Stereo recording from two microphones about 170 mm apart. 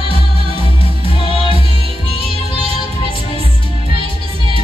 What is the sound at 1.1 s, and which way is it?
Music, 30° left (ahead or behind).